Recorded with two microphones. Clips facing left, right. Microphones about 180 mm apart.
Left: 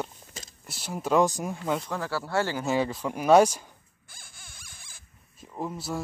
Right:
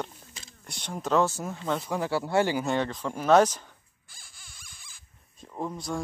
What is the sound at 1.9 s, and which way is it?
Speech, 20° right (ahead or behind).